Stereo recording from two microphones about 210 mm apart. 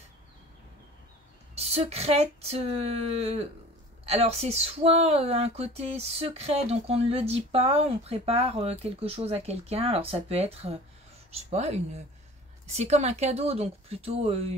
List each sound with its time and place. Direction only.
1.5 s speech: 30° right (ahead or behind)